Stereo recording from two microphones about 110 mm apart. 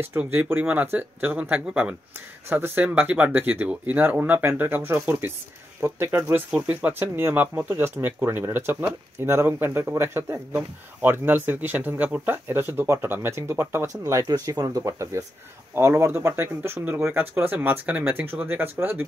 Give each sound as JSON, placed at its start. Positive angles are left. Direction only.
{"t": 0.2, "sound": "speech", "side_deg": -15}